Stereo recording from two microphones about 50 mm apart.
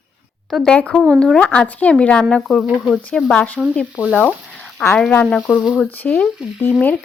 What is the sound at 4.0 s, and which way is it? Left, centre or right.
Speech, right.